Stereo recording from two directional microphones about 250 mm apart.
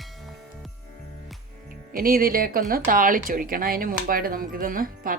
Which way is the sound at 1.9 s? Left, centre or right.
Right.